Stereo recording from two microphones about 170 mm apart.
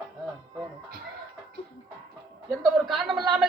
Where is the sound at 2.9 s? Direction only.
Centre (ahead or behind).